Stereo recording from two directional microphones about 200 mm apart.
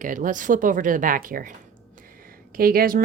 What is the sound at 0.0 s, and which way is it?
Speech, 40° right (ahead or behind).